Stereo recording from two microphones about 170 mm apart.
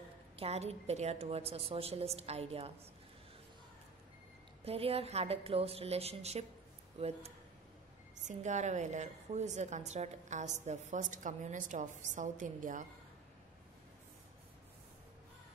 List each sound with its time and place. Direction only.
0.4 s a woman's voice: 40° right (ahead or behind)
4.6 s a woman's voice: 35° right (ahead or behind)